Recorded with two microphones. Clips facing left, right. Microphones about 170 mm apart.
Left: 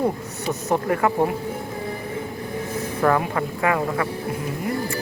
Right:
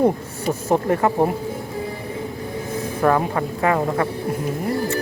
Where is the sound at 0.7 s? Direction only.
25° right (ahead or behind).